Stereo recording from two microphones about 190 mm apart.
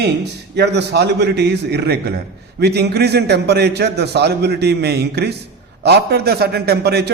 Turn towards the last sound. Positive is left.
turn(degrees=-60)  # may be behind; listen again after turning